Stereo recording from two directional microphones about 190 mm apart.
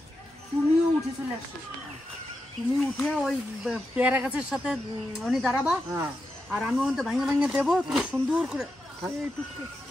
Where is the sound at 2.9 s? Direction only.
Centre (ahead or behind).